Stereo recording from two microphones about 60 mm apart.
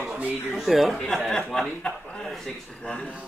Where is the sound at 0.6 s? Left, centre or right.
Centre.